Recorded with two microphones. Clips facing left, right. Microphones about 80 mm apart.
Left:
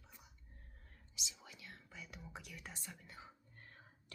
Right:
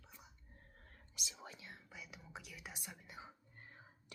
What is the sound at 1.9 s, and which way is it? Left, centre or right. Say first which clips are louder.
Whispering: left 2 dB; centre.